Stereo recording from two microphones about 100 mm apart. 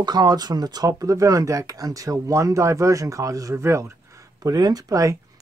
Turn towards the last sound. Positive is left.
turn(degrees=-35)  # may be behind; listen again after turning